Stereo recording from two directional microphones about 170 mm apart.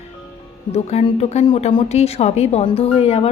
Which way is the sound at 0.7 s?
40° left (ahead or behind).